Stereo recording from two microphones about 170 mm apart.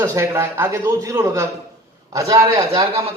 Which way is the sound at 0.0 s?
15° right (ahead or behind).